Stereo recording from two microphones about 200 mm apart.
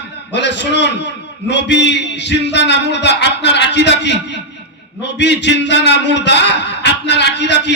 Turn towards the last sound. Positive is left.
turn(degrees=60)  # may be behind; listen again after turning